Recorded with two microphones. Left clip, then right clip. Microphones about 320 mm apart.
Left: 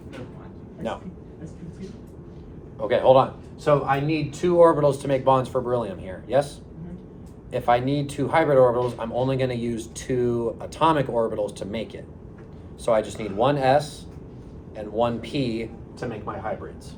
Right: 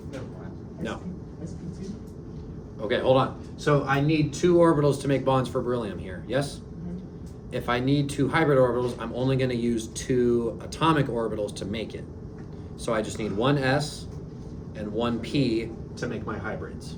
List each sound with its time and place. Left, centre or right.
2.8 s speech: centre
7.5 s speech: centre
12.8 s speech: centre